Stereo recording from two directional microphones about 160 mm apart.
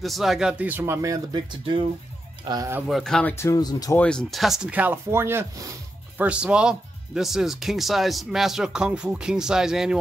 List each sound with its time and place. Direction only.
0.0 s speech: centre (ahead or behind); by 2.7 s 25° right (ahead or behind)
2.9 s speech: 5° left (ahead or behind)
3.3 s speech: 20° left (ahead or behind)
3.9 s speech: 5° left (ahead or behind); by 6.2 s 15° right (ahead or behind)
6.2 s speech: 5° right (ahead or behind)